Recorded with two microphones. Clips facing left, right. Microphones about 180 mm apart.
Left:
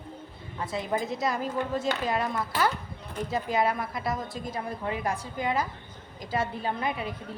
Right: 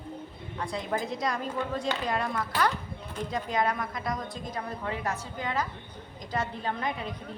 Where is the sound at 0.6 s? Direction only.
5° left (ahead or behind).